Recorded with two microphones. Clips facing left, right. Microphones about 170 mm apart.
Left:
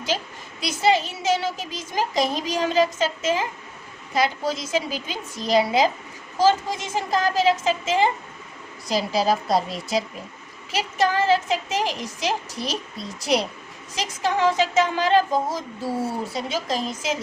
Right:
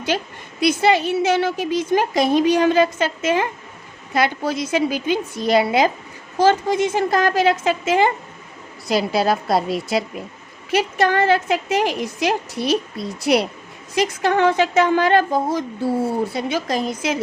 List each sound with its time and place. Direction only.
0.1 s a woman's voice: 60° right (ahead or behind)